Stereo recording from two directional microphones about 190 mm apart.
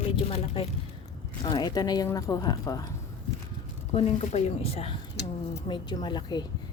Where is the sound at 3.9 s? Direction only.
35° left (ahead or behind).